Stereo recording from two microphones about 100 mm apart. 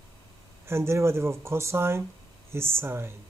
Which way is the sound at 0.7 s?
25° right (ahead or behind).